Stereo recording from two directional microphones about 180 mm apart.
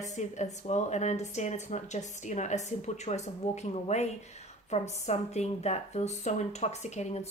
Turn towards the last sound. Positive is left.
turn(degrees=40)  # may be behind; listen again after turning